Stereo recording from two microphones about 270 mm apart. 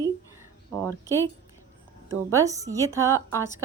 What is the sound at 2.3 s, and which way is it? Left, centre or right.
Speech, centre.